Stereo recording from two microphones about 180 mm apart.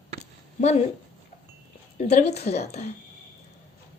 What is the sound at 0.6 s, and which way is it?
Speech, 35° left (ahead or behind).